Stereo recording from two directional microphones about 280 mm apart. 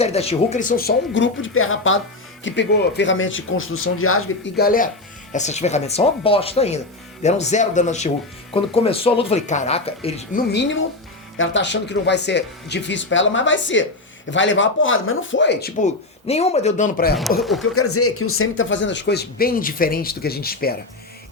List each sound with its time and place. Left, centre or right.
0.0 s speech: left
10.5 s speech: left
15.8 s speech: left
17.6 s speech: left